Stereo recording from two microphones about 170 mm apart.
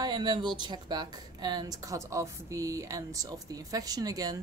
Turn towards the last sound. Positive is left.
turn(degrees=-20)  # may be behind; listen again after turning